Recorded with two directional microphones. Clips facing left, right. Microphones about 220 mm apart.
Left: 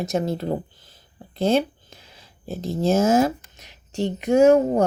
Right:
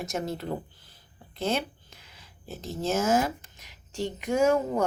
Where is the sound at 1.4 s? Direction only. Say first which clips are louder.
Left 9 dB; 30° left (ahead or behind).